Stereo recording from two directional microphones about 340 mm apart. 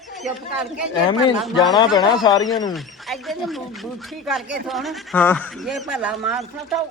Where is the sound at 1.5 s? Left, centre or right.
Centre.